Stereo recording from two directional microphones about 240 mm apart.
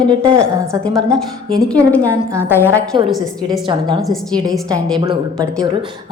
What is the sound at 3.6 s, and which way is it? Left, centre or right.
Speech, centre.